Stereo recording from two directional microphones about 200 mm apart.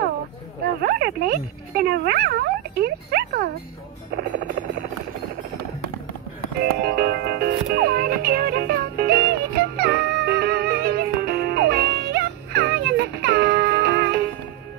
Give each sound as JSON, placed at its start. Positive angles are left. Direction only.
{"t": 0.8, "sound": "speech", "side_deg": -50}
{"t": 6.6, "sound": "music", "side_deg": -50}